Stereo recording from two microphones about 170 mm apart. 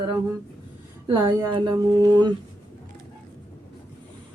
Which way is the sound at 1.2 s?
25° right (ahead or behind).